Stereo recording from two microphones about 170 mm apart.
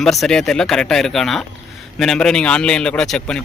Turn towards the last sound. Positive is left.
turn(degrees=5)  # may be behind; listen again after turning